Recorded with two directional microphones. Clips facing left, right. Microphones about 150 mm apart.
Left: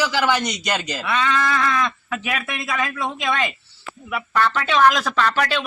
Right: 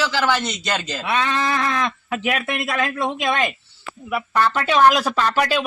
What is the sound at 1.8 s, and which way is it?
A man's voice, 45° right (ahead or behind).